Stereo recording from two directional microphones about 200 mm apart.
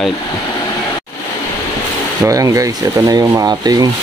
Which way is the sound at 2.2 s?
15° right (ahead or behind).